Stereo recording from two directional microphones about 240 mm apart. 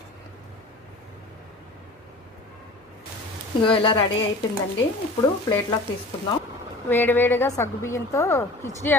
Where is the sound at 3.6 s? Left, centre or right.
Left.